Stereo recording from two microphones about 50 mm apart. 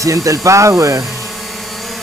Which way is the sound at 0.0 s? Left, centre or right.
Right.